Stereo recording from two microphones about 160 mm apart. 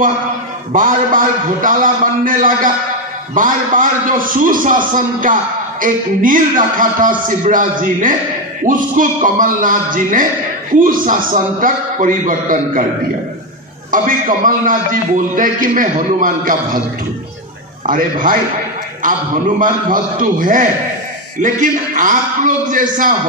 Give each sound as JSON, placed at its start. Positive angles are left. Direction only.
{"t": 0.7, "sound": "a man's voice", "side_deg": -55}
{"t": 13.9, "sound": "a man's voice", "side_deg": -55}
{"t": 17.8, "sound": "a man's voice", "side_deg": -60}
{"t": 19.6, "sound": "a man's voice", "side_deg": -60}